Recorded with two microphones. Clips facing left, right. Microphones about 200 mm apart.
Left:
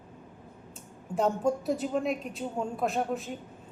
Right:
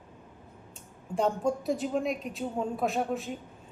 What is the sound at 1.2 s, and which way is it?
A woman's voice, 5° left (ahead or behind).